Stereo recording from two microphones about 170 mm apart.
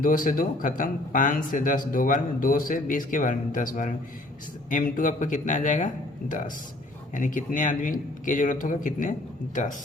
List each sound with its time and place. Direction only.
0.0 s speech: 55° left (ahead or behind)